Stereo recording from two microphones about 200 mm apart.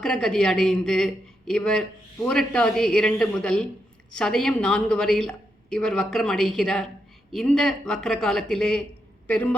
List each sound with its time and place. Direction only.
0.0 s a woman's voice: centre (ahead or behind)